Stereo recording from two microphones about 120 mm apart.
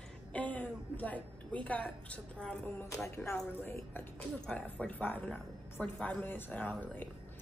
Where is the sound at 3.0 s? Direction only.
25° left (ahead or behind).